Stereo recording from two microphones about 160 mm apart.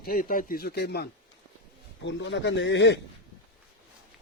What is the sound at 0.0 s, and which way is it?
Speech, 65° left (ahead or behind).